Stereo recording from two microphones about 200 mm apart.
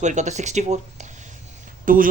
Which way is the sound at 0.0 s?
35° right (ahead or behind).